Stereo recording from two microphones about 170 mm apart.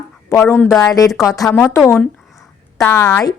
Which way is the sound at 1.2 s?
20° left (ahead or behind).